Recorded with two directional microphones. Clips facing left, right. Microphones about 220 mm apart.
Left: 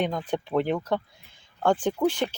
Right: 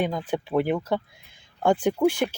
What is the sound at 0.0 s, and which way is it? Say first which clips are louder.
Speech: right 1 dB; 5° right (ahead or behind).